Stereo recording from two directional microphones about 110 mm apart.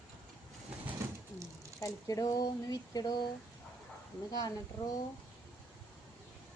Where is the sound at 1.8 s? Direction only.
30° left (ahead or behind).